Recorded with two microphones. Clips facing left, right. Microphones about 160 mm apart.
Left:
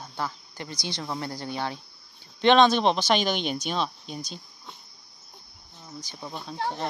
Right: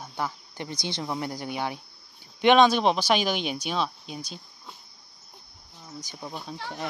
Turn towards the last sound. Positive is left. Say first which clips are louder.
# even
turn(degrees=-10)  # may be behind; listen again after turning